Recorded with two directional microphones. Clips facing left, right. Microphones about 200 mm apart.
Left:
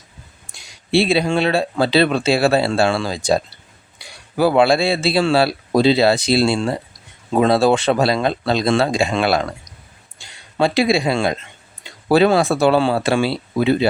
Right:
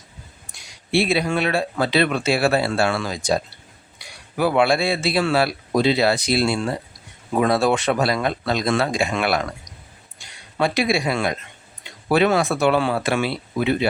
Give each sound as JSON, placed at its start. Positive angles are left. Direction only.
{"t": 0.5, "sound": "speech", "side_deg": 30}